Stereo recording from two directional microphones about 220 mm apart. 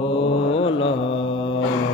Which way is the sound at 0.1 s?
25° left (ahead or behind).